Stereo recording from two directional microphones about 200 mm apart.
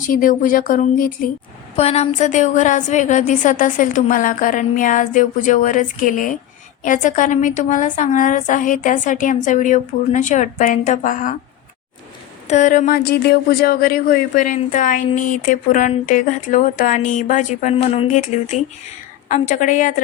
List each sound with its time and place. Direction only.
0.1 s speech: 45° left (ahead or behind)
1.7 s speech: 30° left (ahead or behind)
12.5 s speech: 40° left (ahead or behind)